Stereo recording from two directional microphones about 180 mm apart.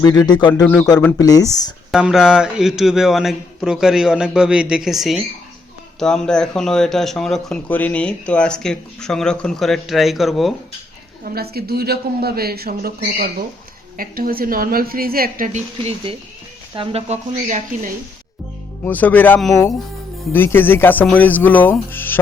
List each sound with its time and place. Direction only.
0.0 s speech: 20° left (ahead or behind)
0.6 s speech: 5° left (ahead or behind)
1.2 s speech: 20° left (ahead or behind)
1.9 s speech: 5° right (ahead or behind)
11.3 s speech: 60° right (ahead or behind)
15.5 s speech: 30° right (ahead or behind)
18.9 s speech: 10° left (ahead or behind)